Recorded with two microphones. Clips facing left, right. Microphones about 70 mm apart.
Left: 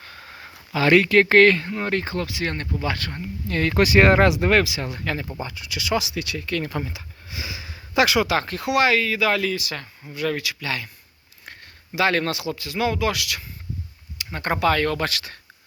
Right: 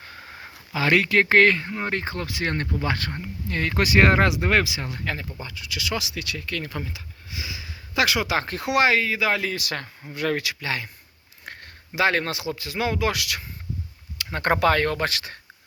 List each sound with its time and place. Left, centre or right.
0.0 s a sound: centre
0.9 s speech: centre
2.2 s speech: right
3.5 s speech: centre
4.9 s speech: centre
5.4 s speech: centre
7.3 s sniff: left
7.9 s speech: centre
8.4 s speech: right
9.6 s speech: right
11.9 s speech: right
14.3 s speech: right